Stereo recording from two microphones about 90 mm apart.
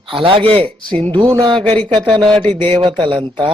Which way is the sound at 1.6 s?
15° left (ahead or behind).